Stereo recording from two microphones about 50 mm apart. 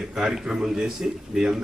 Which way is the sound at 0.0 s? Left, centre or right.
Centre.